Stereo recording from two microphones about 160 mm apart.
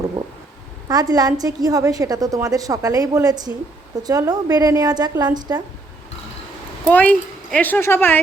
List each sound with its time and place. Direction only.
0.9 s a woman's voice: 25° right (ahead or behind)
6.8 s speech: 10° left (ahead or behind)